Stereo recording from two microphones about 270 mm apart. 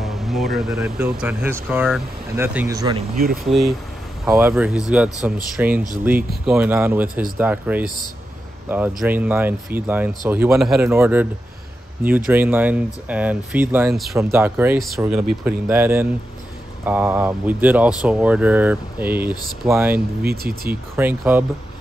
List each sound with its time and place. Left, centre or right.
0.0 s speech: centre
3.4 s speech: centre
20.2 s speech: right
20.9 s speech: centre